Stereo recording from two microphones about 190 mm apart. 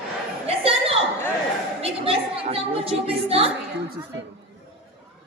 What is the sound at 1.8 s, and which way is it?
A woman's voice, 30° right (ahead or behind).